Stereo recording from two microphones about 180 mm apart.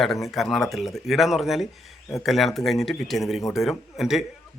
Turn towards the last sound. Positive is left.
turn(degrees=0)  # may be behind; listen again after turning